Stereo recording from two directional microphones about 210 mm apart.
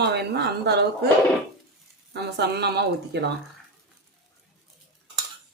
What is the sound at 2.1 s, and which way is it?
Speech, 50° right (ahead or behind).